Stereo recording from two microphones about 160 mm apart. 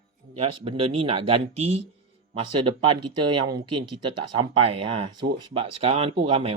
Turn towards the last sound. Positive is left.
turn(degrees=-35)  # may be behind; listen again after turning